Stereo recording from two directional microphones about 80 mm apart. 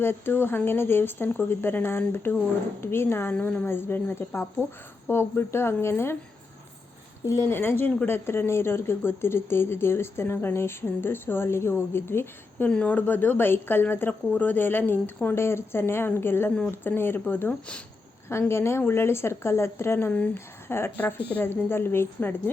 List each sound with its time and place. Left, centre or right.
0.0 s speech: left
3.3 s speech: centre
7.3 s speech: left
7.5 s speech: left
18.3 s speech: left
20.1 s speech: centre
20.3 s speech: left